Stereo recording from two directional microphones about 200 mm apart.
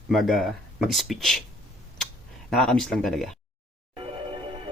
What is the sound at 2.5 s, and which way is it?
Speech, centre (ahead or behind).